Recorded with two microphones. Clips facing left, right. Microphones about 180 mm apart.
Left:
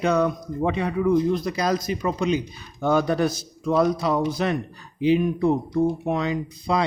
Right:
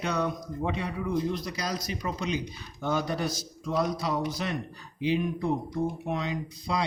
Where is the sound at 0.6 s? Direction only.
60° left (ahead or behind).